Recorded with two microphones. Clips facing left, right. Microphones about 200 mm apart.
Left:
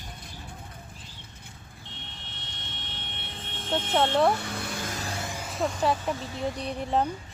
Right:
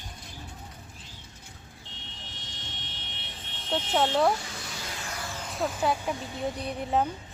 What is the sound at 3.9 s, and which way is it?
Speech, 5° right (ahead or behind).